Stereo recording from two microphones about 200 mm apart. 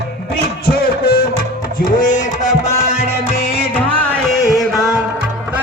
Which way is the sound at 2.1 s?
40° left (ahead or behind).